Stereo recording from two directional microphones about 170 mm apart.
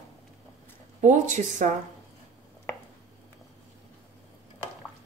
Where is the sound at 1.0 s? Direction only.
45° right (ahead or behind).